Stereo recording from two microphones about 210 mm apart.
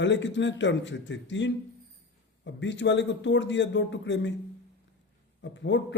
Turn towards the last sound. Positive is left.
turn(degrees=60)  # may be behind; listen again after turning